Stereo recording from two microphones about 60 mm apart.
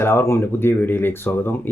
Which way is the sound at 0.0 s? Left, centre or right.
Left.